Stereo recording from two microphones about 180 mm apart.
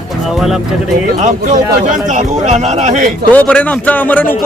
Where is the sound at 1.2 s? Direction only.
40° right (ahead or behind).